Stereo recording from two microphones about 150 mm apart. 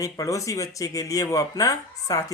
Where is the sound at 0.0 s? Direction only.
20° left (ahead or behind).